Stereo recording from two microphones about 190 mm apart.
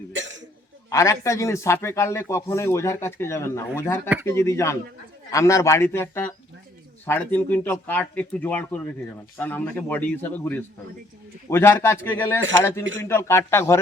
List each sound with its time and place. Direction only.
0.1 s cough: 80° right
0.9 s speech: 15° left (ahead or behind)